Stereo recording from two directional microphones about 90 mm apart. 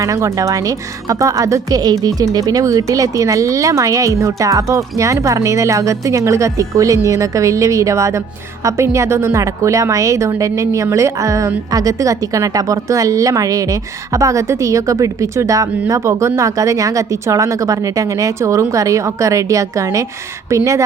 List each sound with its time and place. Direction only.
0.0 s a woman's voice: 35° right (ahead or behind)